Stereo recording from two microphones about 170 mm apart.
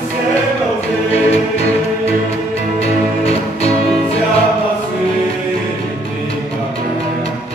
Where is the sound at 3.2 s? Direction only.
40° left (ahead or behind).